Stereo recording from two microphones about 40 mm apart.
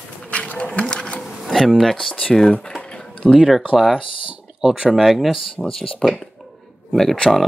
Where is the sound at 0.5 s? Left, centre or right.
Left.